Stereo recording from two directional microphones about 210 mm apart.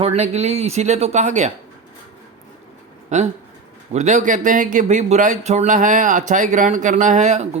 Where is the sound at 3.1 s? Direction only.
35° right (ahead or behind).